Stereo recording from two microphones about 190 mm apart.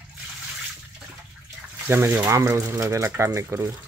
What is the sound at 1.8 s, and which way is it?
Speech, 10° right (ahead or behind).